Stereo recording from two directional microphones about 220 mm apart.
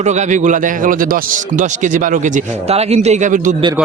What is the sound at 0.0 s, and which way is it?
A man's voice, 35° right (ahead or behind).